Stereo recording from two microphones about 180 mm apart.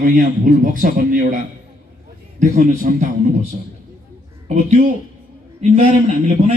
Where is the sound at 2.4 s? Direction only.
45° right (ahead or behind).